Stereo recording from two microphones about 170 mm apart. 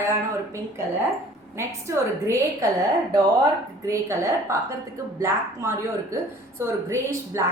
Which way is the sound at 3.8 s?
15° right (ahead or behind).